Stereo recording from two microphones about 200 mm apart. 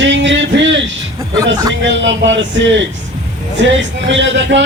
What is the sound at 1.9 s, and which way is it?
Speech, 65° right (ahead or behind).